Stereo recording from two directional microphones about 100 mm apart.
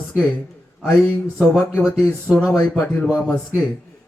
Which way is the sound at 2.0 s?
10° left (ahead or behind).